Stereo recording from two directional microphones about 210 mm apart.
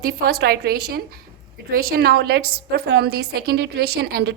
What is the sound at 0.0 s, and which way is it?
A woman's voice, 45° right (ahead or behind).